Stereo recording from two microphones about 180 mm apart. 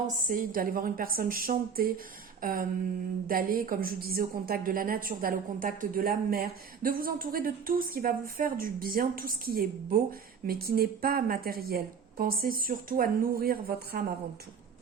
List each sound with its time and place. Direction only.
0.3 s a woman's voice: 50° right (ahead or behind)
2.4 s a sound: 55° right (ahead or behind)
3.2 s a woman's voice: 55° right (ahead or behind)